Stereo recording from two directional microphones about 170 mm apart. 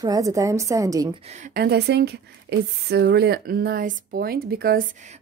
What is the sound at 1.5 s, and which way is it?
Speech, 75° right (ahead or behind).